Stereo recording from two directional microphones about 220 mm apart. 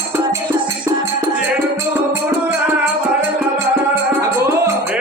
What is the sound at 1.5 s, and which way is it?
Music, 15° right (ahead or behind).